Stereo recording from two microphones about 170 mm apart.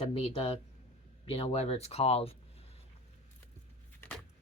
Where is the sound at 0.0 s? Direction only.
35° left (ahead or behind).